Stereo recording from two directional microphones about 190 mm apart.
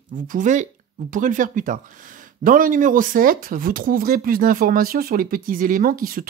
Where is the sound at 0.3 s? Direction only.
40° right (ahead or behind).